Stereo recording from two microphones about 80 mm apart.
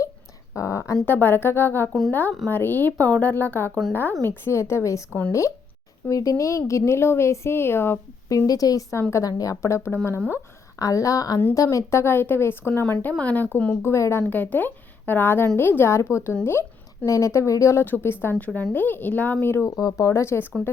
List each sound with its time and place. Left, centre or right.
0.5 s speech: left
1.0 s a woman's voice: left
1.9 s a woman's voice: centre
2.5 s a woman's voice: left
8.4 s a woman's voice: left
9.0 s a woman's voice: left
9.2 s a woman's voice: left
10.8 s a woman's voice: left
13.8 s a woman's voice: left
17.8 s a woman's voice: left
18.3 s a woman's voice: centre
19.6 s a woman's voice: left